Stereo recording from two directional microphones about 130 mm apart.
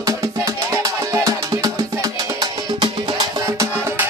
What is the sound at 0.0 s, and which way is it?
Music, 25° right (ahead or behind).